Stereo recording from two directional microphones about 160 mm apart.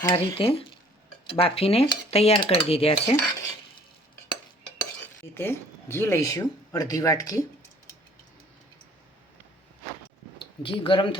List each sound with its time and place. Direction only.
0.0 s speech: 20° left (ahead or behind)
0.3 s speech: 35° left (ahead or behind)
5.3 s speech: 15° left (ahead or behind)
10.3 s speech: 30° left (ahead or behind)